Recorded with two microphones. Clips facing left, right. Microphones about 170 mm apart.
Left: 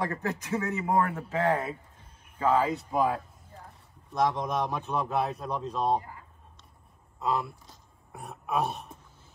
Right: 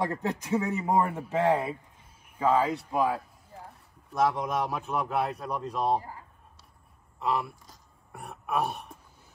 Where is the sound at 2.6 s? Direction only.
Centre (ahead or behind).